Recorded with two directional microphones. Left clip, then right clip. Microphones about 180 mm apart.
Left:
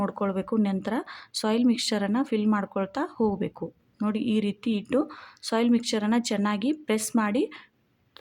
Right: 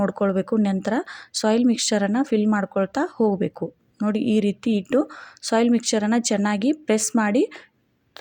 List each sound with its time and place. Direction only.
0.0 s speech: 20° right (ahead or behind)